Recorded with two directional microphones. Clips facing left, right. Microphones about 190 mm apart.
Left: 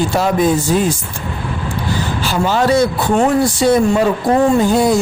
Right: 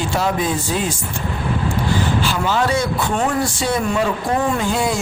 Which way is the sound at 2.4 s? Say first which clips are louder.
Left 9 dB; 40° left (ahead or behind).